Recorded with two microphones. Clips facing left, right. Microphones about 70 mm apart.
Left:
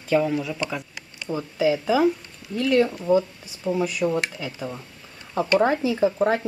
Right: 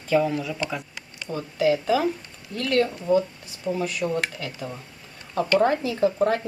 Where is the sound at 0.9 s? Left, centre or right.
Centre.